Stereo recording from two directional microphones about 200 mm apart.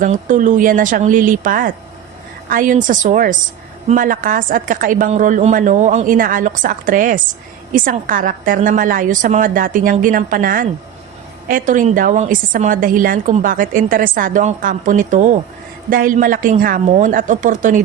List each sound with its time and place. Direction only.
0.0 s a woman's voice: 40° right (ahead or behind)